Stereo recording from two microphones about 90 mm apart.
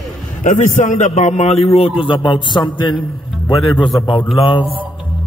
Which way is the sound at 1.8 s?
75° left (ahead or behind).